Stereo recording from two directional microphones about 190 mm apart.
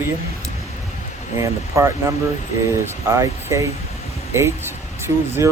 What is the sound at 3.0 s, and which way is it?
Speech, 15° right (ahead or behind).